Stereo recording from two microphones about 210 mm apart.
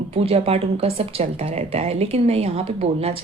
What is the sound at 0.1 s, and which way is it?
Speech, 30° right (ahead or behind).